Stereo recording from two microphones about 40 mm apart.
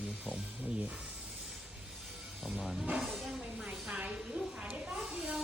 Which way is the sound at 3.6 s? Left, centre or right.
Right.